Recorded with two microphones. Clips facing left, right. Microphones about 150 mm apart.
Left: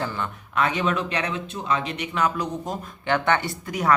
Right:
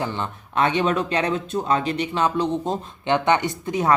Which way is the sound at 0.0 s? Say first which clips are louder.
Right 2 dB; 25° right (ahead or behind).